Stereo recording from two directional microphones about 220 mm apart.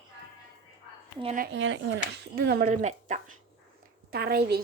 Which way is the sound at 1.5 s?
55° right (ahead or behind).